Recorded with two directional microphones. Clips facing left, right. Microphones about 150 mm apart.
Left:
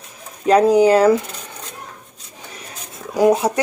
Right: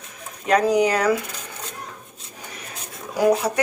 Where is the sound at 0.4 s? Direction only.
30° left (ahead or behind).